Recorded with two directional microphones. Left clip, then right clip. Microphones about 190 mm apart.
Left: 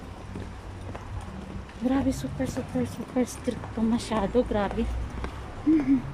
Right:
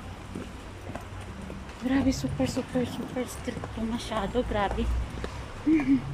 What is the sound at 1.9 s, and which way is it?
Speech, 5° left (ahead or behind).